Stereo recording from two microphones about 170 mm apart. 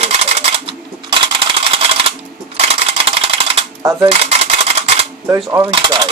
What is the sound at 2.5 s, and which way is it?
Typewriter, 35° right (ahead or behind).